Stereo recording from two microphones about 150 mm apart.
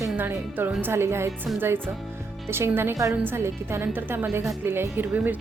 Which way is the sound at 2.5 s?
15° right (ahead or behind).